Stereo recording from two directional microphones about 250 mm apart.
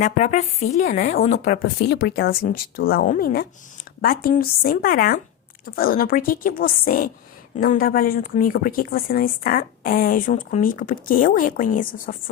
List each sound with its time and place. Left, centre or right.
0.0 s a woman's voice: left